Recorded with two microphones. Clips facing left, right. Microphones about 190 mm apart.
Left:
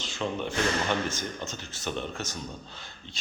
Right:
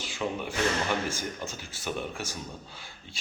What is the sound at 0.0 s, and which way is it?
Speech, 10° right (ahead or behind).